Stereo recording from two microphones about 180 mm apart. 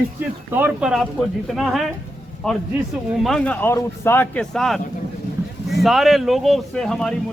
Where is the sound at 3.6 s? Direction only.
15° left (ahead or behind).